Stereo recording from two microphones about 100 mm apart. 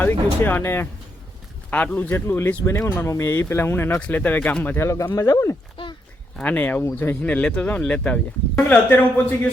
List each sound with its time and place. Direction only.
0.0 s speech: 20° left (ahead or behind); by 5.5 s 35° left (ahead or behind)
6.3 s speech: 15° left (ahead or behind)